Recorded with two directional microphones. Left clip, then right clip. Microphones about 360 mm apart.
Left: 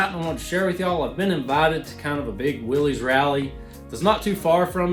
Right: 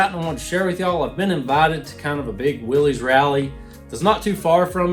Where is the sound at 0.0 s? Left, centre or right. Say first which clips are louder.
Right 4 dB; centre.